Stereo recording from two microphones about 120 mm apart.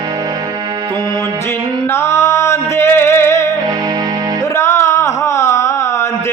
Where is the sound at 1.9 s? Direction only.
25° left (ahead or behind).